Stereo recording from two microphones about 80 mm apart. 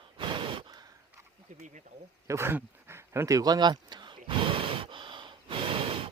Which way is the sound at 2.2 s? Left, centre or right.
Right.